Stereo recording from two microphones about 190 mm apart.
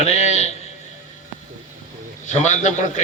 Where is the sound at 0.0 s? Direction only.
35° left (ahead or behind).